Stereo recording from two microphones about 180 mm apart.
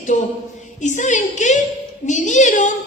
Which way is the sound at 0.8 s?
45° left (ahead or behind).